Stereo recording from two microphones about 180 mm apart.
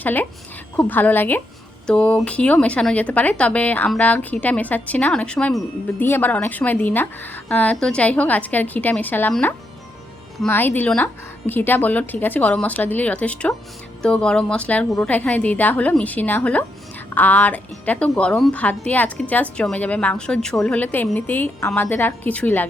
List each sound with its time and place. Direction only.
0.0 s a woman's voice: 10° left (ahead or behind)